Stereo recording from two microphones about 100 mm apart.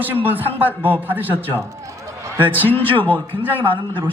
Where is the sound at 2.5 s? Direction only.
20° left (ahead or behind).